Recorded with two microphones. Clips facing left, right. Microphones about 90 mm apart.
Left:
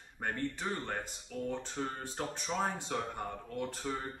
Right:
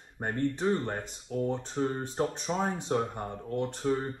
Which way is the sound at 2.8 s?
35° right (ahead or behind).